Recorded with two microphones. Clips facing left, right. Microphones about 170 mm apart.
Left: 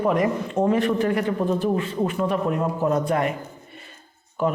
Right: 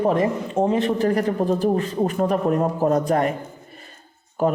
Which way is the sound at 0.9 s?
35° right (ahead or behind).